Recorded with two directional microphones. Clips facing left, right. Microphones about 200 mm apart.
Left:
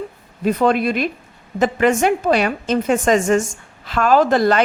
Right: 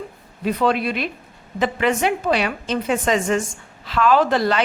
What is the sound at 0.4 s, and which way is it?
A woman's voice, 45° left (ahead or behind).